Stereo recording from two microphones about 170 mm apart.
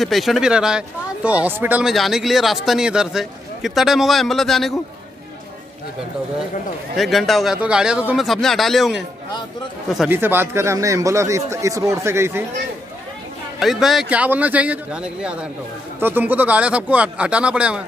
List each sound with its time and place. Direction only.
0.0 s speech: centre (ahead or behind)
7.0 s speech: centre (ahead or behind)
10.0 s a man's voice: 10° right (ahead or behind)
13.6 s a man's voice: centre (ahead or behind)